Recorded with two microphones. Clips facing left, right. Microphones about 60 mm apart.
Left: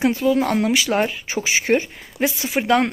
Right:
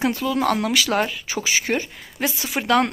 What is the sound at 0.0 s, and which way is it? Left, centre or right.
Speech, left.